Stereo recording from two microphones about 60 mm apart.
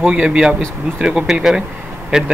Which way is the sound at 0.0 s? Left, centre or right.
Centre.